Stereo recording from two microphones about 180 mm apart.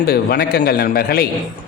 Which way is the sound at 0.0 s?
60° left (ahead or behind).